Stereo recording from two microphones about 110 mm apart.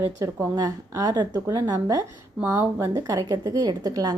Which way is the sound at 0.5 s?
40° right (ahead or behind).